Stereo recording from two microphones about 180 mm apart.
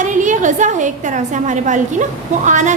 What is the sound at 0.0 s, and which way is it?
A woman's voice, 45° right (ahead or behind).